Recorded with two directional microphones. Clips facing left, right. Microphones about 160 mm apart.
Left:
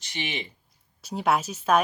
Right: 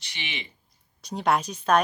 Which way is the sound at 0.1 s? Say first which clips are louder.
Left 5 dB; 45° left (ahead or behind).